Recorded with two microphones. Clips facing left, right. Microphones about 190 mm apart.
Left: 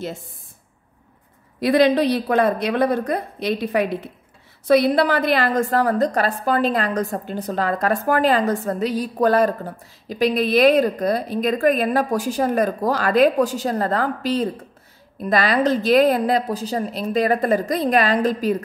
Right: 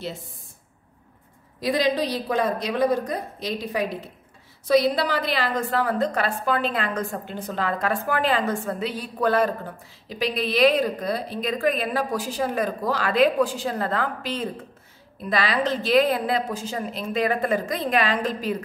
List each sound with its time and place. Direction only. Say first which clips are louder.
1.6 s a woman's voice: left 7 dB; 60° left (ahead or behind); by 18.6 s 40° left (ahead or behind)